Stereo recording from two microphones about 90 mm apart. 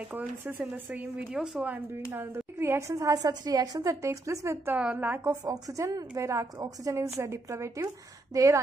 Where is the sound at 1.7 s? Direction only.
25° right (ahead or behind).